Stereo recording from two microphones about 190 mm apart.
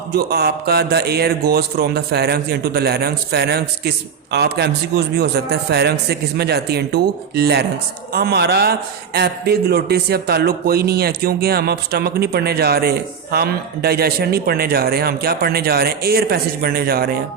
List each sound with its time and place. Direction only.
0.1 s speech: 60° right (ahead or behind)